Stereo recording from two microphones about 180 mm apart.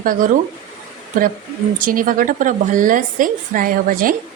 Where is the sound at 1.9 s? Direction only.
50° right (ahead or behind).